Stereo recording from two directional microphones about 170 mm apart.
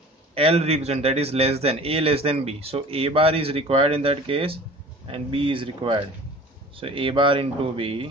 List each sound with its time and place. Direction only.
0.3 s a man's voice: 35° right (ahead or behind)